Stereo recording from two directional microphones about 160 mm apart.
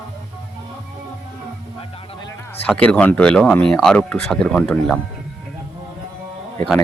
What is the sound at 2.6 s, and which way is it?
Speech, 10° left (ahead or behind).